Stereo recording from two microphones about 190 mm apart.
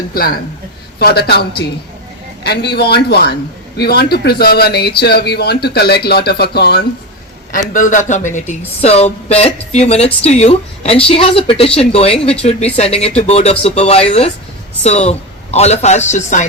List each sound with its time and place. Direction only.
0.1 s a man's voice: 50° left (ahead or behind)
7.5 s speech: 45° left (ahead or behind)